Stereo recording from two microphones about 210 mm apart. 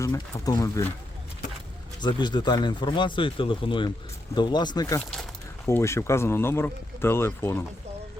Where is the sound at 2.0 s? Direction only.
20° left (ahead or behind).